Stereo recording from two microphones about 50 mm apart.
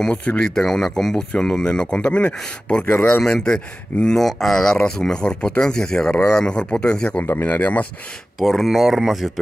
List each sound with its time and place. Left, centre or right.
0.4 s speech: centre
2.8 s speech: left
3.2 s speech: centre
7.4 s speech: left
8.4 s speech: centre
8.6 s speech: centre